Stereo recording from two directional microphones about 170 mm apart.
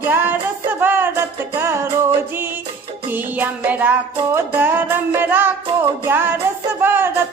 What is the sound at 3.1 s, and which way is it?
Music, 10° right (ahead or behind).